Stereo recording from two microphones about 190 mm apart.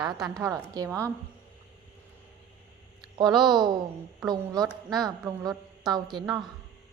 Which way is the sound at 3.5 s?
20° right (ahead or behind).